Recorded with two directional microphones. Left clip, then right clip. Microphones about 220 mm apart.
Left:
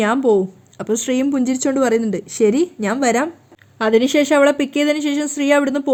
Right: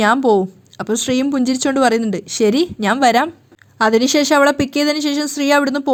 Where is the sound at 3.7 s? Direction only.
35° right (ahead or behind).